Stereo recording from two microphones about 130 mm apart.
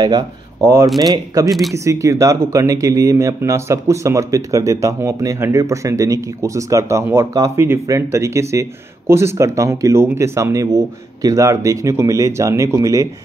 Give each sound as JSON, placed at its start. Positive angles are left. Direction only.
{"t": 0.9, "sound": "speech", "side_deg": -30}